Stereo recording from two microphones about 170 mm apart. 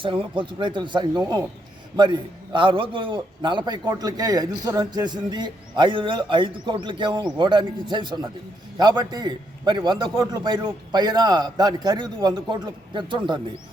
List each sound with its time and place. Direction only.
0.0 s a man's voice: 30° right (ahead or behind)